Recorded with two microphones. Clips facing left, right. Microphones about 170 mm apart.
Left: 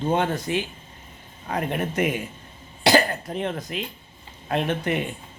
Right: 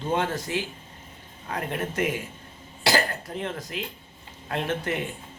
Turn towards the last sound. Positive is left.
turn(degrees=20)  # may be behind; listen again after turning